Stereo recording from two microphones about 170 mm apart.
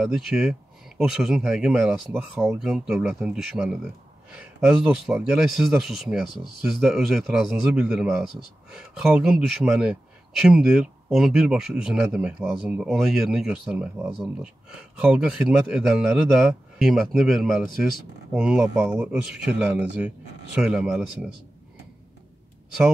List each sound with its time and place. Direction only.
0.0 s speech: 5° right (ahead or behind)